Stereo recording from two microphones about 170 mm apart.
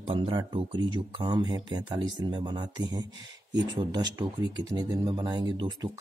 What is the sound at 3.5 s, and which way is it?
Speech, 90° right.